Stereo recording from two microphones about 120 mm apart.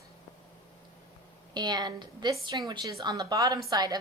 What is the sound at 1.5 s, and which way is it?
A woman's voice, 35° right (ahead or behind).